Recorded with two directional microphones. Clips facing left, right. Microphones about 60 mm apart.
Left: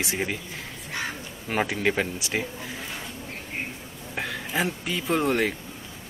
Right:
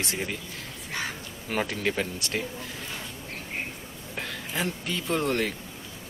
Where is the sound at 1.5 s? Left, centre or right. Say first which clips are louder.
Left 3 dB; centre.